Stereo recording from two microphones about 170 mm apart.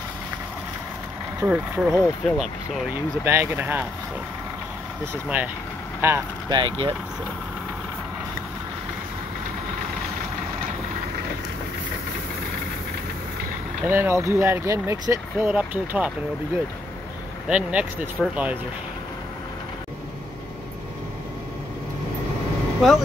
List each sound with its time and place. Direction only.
1.4 s speech: 10° right (ahead or behind)
3.3 s speech: 15° right (ahead or behind)
5.1 s speech: 10° right (ahead or behind)
6.5 s speech: 25° right (ahead or behind)
13.8 s speech: 15° right (ahead or behind)
17.5 s speech: 10° right (ahead or behind)
22.8 s speech: centre (ahead or behind)